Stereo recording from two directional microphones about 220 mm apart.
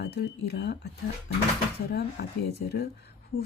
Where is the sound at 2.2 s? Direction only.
50° left (ahead or behind).